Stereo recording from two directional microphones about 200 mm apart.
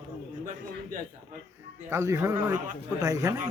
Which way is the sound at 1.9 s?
15° right (ahead or behind).